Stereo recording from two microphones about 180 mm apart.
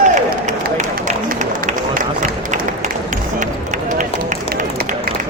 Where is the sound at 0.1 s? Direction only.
40° right (ahead or behind).